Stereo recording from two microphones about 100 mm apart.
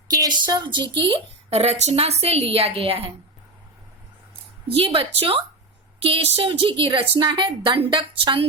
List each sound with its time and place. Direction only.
0.1 s a woman's voice: 40° right (ahead or behind)
1.5 s a woman's voice: 90° right
4.7 s a woman's voice: 65° right (ahead or behind)